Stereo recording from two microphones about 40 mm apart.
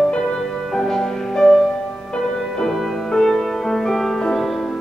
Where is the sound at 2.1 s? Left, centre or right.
Left.